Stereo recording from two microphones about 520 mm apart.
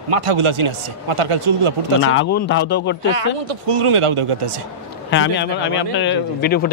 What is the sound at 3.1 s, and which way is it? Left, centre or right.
Speech, right.